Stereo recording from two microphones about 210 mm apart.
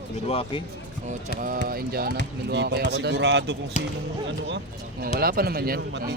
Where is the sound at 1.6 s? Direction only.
45° right (ahead or behind).